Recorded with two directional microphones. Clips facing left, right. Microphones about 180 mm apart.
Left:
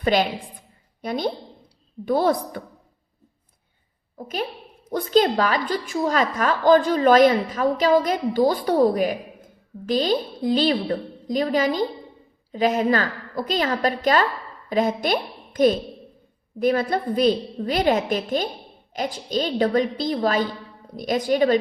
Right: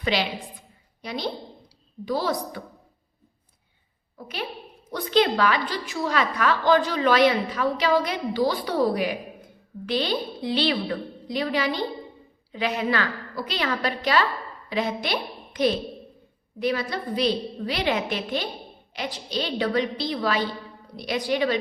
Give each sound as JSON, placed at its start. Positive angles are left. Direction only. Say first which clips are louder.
{"t": 0.0, "sound": "a woman's voice", "louder": "left 5 dB", "side_deg": 50}
{"t": 4.9, "sound": "a woman's voice", "louder": "left 3 dB", "side_deg": 45}